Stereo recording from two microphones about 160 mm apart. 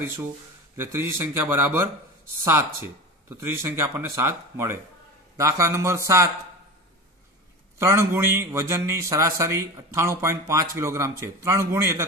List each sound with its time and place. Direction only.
0.7 s a man's voice: 15° right (ahead or behind)
3.3 s a man's voice: 15° right (ahead or behind)
7.8 s a man's voice: 15° right (ahead or behind)